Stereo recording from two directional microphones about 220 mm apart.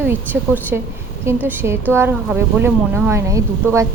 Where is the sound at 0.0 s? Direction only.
10° right (ahead or behind).